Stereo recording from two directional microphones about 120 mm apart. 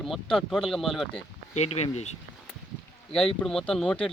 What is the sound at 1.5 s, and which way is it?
Speech, 65° left (ahead or behind).